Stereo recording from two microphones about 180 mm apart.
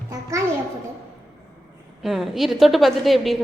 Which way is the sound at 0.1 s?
15° right (ahead or behind).